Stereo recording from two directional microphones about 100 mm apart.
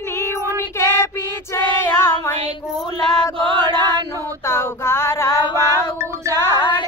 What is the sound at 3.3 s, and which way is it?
Chant, 50° right (ahead or behind).